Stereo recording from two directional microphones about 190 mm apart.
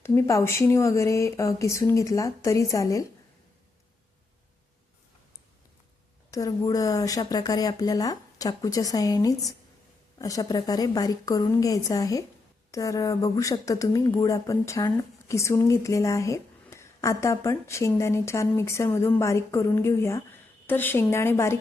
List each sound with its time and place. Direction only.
0.0 s speech: 15° left (ahead or behind)
6.3 s a woman's voice: 20° left (ahead or behind)